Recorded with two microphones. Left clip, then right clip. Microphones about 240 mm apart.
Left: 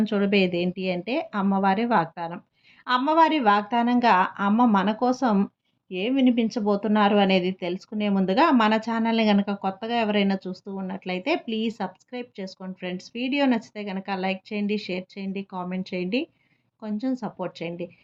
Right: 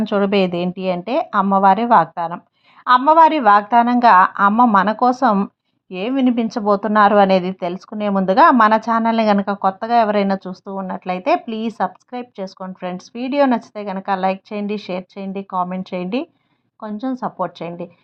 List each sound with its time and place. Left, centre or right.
0.0 s speech: right